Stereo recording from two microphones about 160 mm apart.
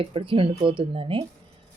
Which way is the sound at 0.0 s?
35° right (ahead or behind).